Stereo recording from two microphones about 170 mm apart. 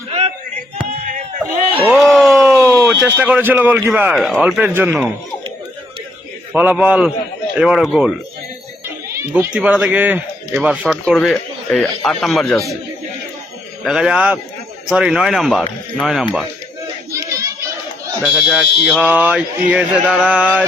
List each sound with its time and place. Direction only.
0.1 s a sound: 40° right (ahead or behind)
2.0 s a sound: centre (ahead or behind)
2.6 s a sound: 15° right (ahead or behind)
3.2 s speech: 10° right (ahead or behind)
4.1 s speech: centre (ahead or behind)
6.5 s speech: 10° right (ahead or behind)
9.3 s speech: 5° right (ahead or behind)
13.8 s speech: centre (ahead or behind)
18.2 s speech: 5° right (ahead or behind)